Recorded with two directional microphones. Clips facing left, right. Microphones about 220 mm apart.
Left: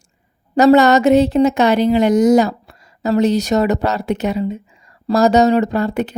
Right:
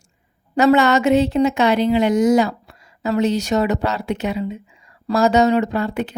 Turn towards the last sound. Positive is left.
turn(degrees=40)  # may be behind; listen again after turning